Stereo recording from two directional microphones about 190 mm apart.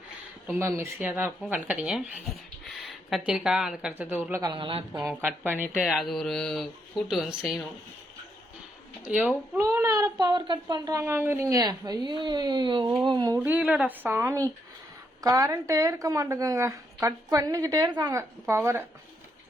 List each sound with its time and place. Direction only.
0.8 s speech: 10° right (ahead or behind)
4.5 s speech: 30° right (ahead or behind)
5.0 s speech: 10° right (ahead or behind)
5.9 s speech: centre (ahead or behind)
9.0 s speech: 5° right (ahead or behind); by 13.4 s 20° right (ahead or behind)
13.4 s speech: 5° right (ahead or behind)